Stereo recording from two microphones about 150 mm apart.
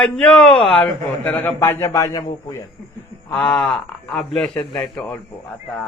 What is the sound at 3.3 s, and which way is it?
A man's voice, 5° left (ahead or behind).